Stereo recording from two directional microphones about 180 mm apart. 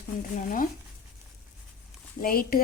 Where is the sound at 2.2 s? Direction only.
55° left (ahead or behind).